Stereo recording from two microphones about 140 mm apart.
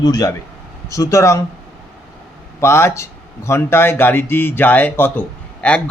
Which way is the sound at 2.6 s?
20° left (ahead or behind).